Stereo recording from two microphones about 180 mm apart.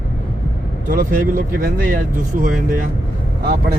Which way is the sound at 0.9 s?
50° right (ahead or behind).